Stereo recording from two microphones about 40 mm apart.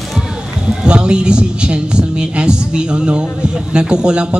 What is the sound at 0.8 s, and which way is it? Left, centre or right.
Speech, right.